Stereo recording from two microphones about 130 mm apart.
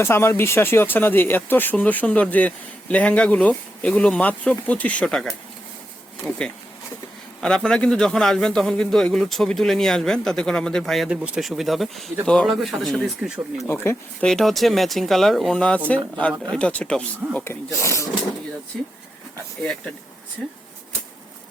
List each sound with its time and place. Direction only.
0.0 s speech: 20° left (ahead or behind)
7.4 s a man's voice: 5° left (ahead or behind)
13.7 s speech: 20° left (ahead or behind)
14.2 s a man's voice: 5° left (ahead or behind)
17.4 s speech: 20° left (ahead or behind)
18.7 s a man's voice: 5° left (ahead or behind)